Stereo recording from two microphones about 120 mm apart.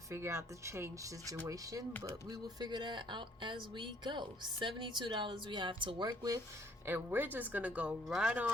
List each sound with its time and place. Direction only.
0.1 s speech: 20° right (ahead or behind)
6.8 s speech: 15° right (ahead or behind)